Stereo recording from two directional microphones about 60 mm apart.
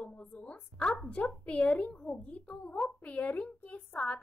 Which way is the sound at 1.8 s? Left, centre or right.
Centre.